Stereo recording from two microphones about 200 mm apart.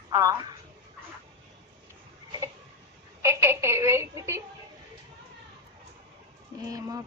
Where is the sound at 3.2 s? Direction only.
15° right (ahead or behind).